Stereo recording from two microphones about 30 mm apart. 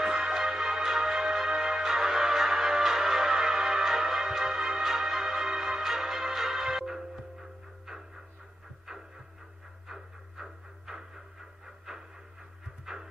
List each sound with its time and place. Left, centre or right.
0.0 s music: centre
9.8 s a sound: centre
11.9 s train: centre
12.8 s music: centre